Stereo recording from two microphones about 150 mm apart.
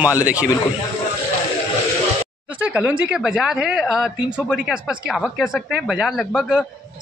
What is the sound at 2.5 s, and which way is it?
Speech, 10° right (ahead or behind).